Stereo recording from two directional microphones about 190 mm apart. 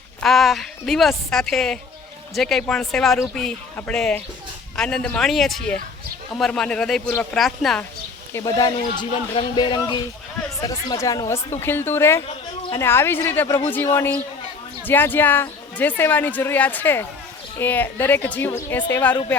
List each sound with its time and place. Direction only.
0.2 s speech: centre (ahead or behind)
8.3 s speech: 15° left (ahead or behind)